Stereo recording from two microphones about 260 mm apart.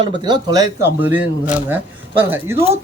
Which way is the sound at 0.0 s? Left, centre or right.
Centre.